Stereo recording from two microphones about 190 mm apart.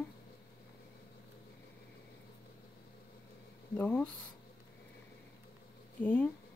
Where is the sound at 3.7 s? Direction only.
5° left (ahead or behind).